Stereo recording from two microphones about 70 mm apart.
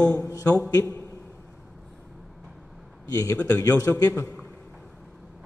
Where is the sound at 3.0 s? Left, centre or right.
Left.